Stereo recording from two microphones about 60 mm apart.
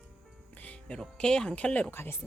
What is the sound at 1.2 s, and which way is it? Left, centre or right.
Speech, centre.